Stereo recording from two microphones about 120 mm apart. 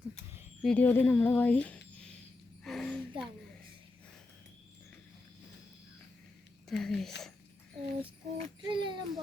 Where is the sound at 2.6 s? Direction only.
5° left (ahead or behind).